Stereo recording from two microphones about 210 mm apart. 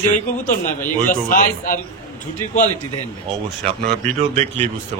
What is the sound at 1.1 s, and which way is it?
Speech, 40° left (ahead or behind).